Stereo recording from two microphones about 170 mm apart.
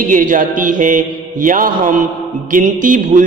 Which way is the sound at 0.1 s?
50° right (ahead or behind).